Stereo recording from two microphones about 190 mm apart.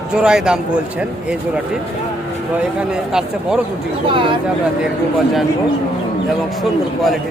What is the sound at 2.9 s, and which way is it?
Speech, 5° right (ahead or behind).